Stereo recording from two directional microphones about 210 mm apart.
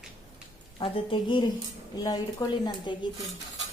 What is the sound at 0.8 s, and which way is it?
A woman's voice, 25° left (ahead or behind).